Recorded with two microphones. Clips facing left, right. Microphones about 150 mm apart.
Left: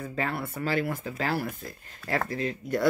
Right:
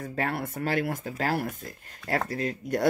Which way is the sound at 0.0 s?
55° right (ahead or behind).